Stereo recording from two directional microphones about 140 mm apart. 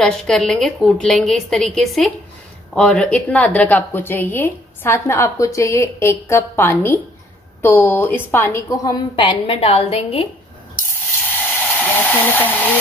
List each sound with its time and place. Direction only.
0.0 s a woman's voice: 5° left (ahead or behind); by 9.2 s 25° left (ahead or behind)
9.2 s a woman's voice: 45° left (ahead or behind)
11.8 s speech: 10° left (ahead or behind)